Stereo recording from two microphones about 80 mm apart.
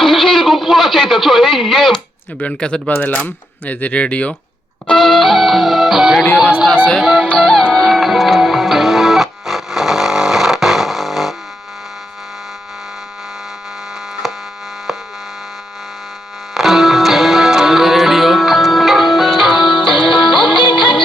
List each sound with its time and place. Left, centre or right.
0.0 s a sound: centre
2.4 s speech: centre
4.9 s music: centre
14.2 s hum: centre
16.6 s music: centre
19.7 s music: left